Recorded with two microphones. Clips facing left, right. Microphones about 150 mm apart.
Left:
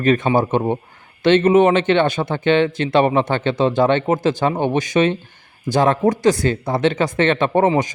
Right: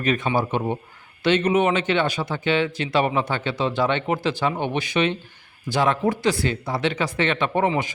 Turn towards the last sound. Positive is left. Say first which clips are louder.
# left 6 dB
turn(degrees=45)  # may be behind; listen again after turning